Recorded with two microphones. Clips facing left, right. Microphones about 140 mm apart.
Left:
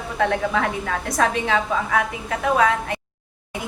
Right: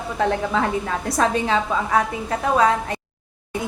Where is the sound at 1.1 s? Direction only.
30° right (ahead or behind).